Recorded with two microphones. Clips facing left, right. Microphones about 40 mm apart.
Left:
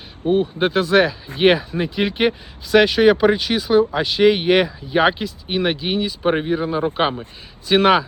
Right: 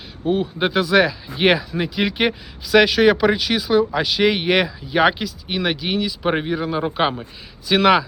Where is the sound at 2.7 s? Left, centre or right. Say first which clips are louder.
Left 1 dB; right.